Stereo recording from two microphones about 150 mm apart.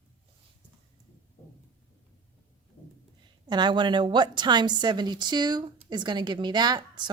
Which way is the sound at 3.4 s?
30° right (ahead or behind).